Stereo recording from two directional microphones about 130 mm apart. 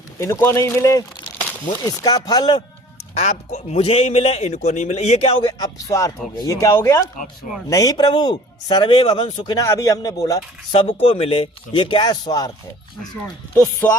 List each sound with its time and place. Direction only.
0.2 s speech: 20° left (ahead or behind)
3.2 s a man's voice: 60° left (ahead or behind)
5.9 s speech: 25° left (ahead or behind)
10.7 s speech: 45° left (ahead or behind)
13.8 s music: 15° left (ahead or behind)